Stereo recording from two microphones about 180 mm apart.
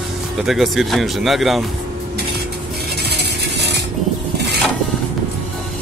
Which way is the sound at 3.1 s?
65° right (ahead or behind).